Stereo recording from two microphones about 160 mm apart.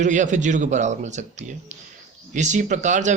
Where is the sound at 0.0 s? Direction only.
50° right (ahead or behind).